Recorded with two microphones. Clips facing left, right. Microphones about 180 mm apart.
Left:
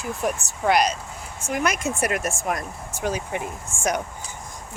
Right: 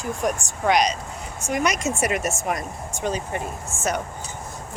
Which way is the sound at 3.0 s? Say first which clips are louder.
Even; 10° left (ahead or behind).